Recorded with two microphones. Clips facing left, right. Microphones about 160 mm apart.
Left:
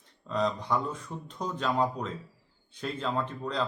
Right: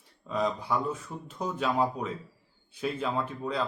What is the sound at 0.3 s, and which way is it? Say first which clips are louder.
A man's voice: even; 5° right (ahead or behind).